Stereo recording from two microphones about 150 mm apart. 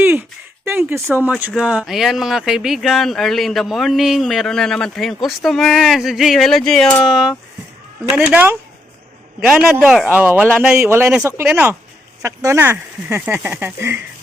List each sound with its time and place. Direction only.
0.6 s a sound: 15° right (ahead or behind)
1.0 s speech: 15° right (ahead or behind)
9.6 s speech: 10° right (ahead or behind)